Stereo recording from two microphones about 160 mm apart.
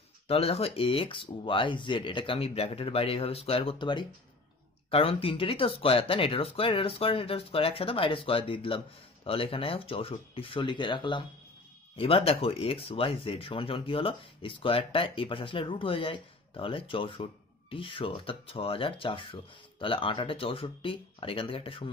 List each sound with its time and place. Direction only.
0.3 s speech: 40° left (ahead or behind)